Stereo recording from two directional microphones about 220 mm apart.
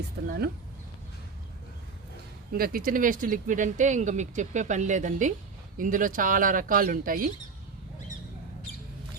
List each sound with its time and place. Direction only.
0.2 s speech: 45° right (ahead or behind)
2.5 s speech: 40° right (ahead or behind)